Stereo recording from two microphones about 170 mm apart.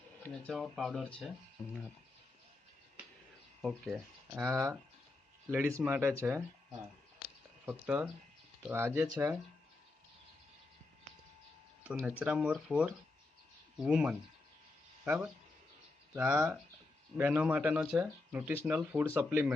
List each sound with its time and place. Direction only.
0.2 s speech: 5° left (ahead or behind)
3.6 s speech: centre (ahead or behind)
4.4 s speech: 20° right (ahead or behind)
7.6 s speech: 10° right (ahead or behind)
11.8 s speech: 5° right (ahead or behind)